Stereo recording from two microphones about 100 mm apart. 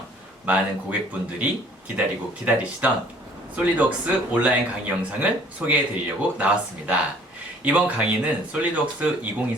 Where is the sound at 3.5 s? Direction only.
15° right (ahead or behind).